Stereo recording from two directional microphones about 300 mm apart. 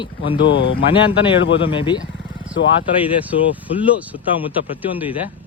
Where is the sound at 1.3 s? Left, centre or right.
Left.